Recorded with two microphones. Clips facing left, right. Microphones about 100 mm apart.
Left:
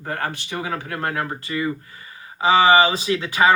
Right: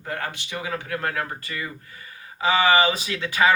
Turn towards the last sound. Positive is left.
turn(degrees=30)  # may be behind; listen again after turning